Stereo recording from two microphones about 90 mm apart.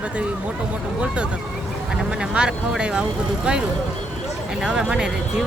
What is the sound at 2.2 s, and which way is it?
Speech, 10° right (ahead or behind).